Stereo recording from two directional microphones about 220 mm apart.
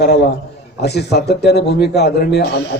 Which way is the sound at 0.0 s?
50° left (ahead or behind).